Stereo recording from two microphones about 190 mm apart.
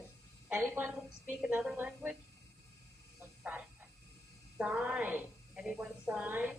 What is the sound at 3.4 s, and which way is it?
Frog, 5° right (ahead or behind).